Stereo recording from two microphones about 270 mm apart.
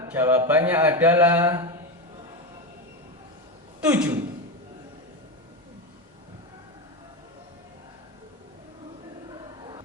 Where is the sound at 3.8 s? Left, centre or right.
Centre.